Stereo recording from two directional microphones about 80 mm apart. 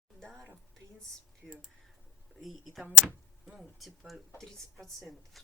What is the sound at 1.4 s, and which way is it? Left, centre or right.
Speech, centre.